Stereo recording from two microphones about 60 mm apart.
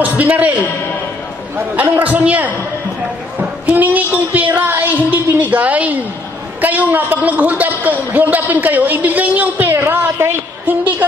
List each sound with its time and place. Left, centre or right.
0.0 s a man's voice: right
1.8 s a man's voice: right
10.7 s a sound: right